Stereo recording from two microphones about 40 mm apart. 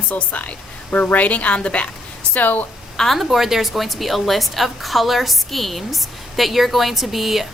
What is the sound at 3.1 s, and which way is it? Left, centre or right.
A woman's voice, centre.